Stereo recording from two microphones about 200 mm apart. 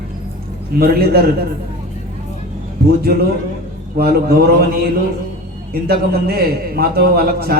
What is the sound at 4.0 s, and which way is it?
A man's voice, 50° right (ahead or behind).